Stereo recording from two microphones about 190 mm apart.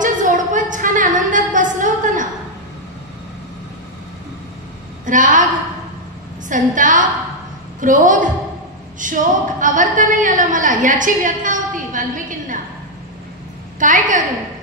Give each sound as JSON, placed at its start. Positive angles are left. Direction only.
{"t": 0.0, "sound": "a sound", "side_deg": -40}
{"t": 5.0, "sound": "a woman's voice", "side_deg": -45}
{"t": 6.5, "sound": "a woman's voice", "side_deg": -40}
{"t": 13.7, "sound": "a woman's voice", "side_deg": -45}